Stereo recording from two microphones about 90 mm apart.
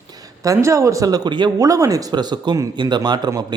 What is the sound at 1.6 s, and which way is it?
A man's voice, 40° right (ahead or behind).